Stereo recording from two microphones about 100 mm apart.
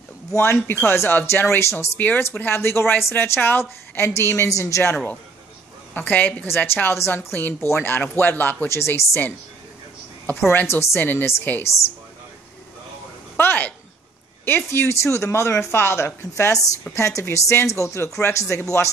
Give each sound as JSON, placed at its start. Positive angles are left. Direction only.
{"t": 0.3, "sound": "a woman's voice", "side_deg": 25}
{"t": 5.9, "sound": "a woman's voice", "side_deg": 15}
{"t": 13.4, "sound": "a sound", "side_deg": 20}
{"t": 14.4, "sound": "a woman's voice", "side_deg": 25}